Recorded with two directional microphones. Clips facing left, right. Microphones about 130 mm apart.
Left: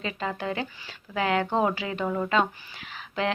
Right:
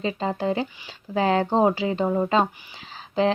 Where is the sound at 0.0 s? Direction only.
30° right (ahead or behind).